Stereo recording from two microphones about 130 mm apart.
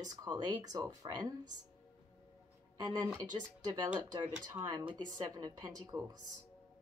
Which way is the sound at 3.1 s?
30° right (ahead or behind).